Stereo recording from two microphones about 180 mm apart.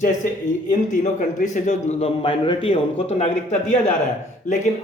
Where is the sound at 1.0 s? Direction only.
45° left (ahead or behind).